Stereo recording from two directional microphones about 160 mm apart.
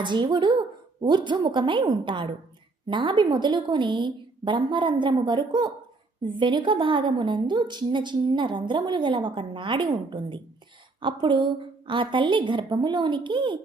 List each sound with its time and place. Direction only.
0.0 s a woman's voice: 30° right (ahead or behind)